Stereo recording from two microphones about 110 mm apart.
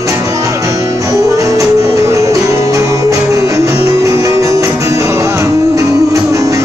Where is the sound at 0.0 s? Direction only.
30° right (ahead or behind).